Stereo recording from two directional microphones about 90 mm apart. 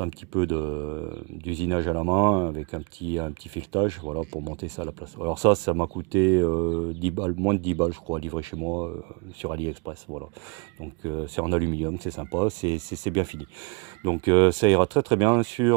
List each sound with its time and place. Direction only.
0.0 s speech: 35° right (ahead or behind)
4.2 s speech: 25° right (ahead or behind); by 15.7 s 40° right (ahead or behind)